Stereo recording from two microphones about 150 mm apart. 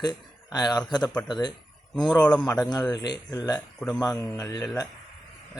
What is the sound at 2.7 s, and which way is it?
Speech, 25° left (ahead or behind).